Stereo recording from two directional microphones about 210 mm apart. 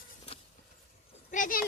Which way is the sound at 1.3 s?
40° left (ahead or behind).